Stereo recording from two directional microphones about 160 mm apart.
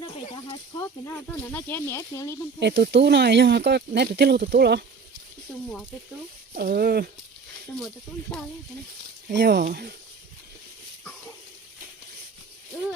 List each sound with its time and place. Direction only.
0.0 s a sound: 35° left (ahead or behind)
1.5 s speech: 10° left (ahead or behind)
2.6 s speech: 90° right
6.6 s speech: 70° right (ahead or behind)
9.3 s speech: 90° right
9.6 s speech: 75° right (ahead or behind)